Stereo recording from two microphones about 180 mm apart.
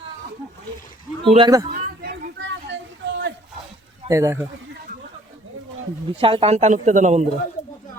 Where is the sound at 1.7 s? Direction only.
45° right (ahead or behind).